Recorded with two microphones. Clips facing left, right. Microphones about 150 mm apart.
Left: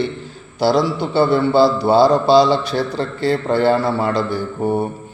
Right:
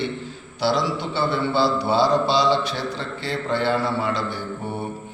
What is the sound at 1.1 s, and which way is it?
A man's voice, 40° left (ahead or behind).